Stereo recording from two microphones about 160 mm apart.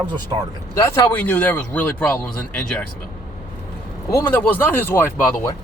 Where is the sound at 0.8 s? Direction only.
15° left (ahead or behind).